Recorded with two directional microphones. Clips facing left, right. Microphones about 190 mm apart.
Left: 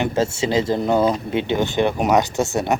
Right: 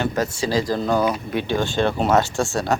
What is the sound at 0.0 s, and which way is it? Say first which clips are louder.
Speech: left 2 dB; 25° left (ahead or behind).